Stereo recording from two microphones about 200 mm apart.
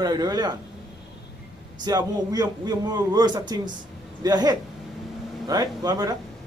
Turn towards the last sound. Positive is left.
turn(degrees=-20)  # may be behind; listen again after turning